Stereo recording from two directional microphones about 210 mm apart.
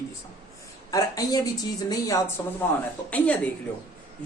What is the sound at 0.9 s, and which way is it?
Speech, 20° left (ahead or behind).